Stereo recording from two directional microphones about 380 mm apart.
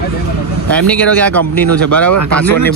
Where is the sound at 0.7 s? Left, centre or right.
Centre.